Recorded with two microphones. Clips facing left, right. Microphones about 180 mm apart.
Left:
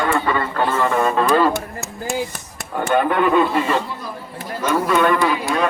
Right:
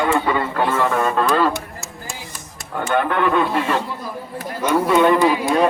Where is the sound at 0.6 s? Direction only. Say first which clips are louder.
Left 2 dB; centre (ahead or behind).